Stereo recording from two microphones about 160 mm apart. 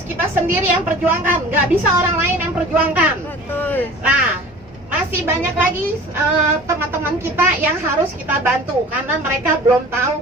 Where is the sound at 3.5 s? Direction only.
10° left (ahead or behind).